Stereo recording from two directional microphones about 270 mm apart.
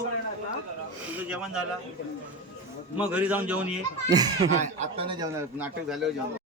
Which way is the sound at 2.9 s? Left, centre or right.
Centre.